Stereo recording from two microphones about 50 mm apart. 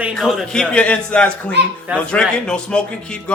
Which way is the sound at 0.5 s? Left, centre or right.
Centre.